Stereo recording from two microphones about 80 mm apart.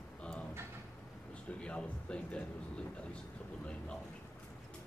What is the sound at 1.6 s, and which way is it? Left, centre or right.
Vehicle, centre.